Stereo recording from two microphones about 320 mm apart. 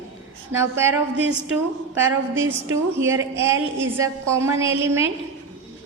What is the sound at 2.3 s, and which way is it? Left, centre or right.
Speech, right.